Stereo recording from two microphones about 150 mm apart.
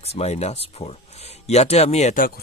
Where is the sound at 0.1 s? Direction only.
45° left (ahead or behind).